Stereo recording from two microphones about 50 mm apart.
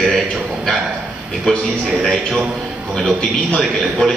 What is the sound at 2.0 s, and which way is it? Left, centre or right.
Speech, centre.